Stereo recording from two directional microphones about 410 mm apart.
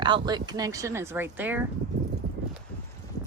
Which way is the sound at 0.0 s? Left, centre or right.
Centre.